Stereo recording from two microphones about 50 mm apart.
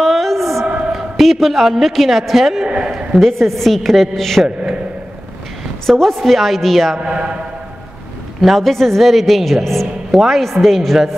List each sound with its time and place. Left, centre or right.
0.0 s a sound: centre
0.9 s a man's voice: centre
5.9 s a woman's voice: centre
7.0 s a man's voice: right
8.4 s a woman's voice: centre